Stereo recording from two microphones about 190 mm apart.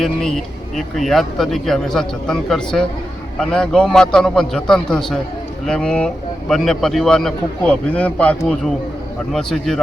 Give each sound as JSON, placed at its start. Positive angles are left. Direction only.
{"t": 0.0, "sound": "a man's voice", "side_deg": 0}